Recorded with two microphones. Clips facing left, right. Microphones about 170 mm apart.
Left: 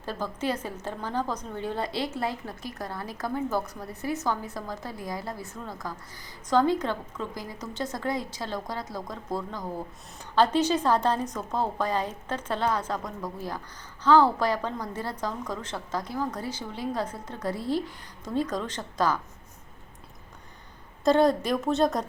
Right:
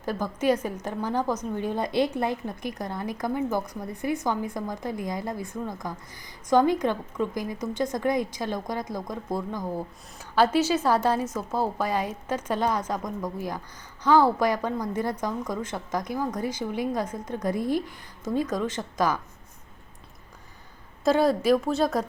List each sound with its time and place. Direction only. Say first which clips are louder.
0.0 s a woman's voice: right 5 dB; 10° right (ahead or behind)
21.0 s a woman's voice: even; 5° right (ahead or behind)